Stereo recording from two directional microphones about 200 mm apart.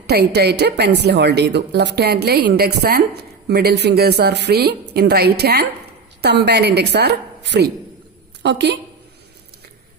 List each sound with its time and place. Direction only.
0.1 s a woman's voice: 55° right (ahead or behind)